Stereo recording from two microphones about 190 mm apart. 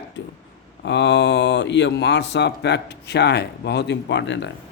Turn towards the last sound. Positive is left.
turn(degrees=70)  # may be behind; listen again after turning